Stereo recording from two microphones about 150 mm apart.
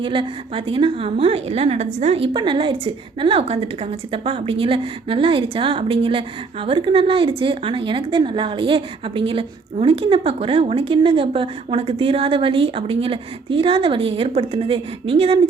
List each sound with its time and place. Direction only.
0.0 s a woman's voice: 35° right (ahead or behind)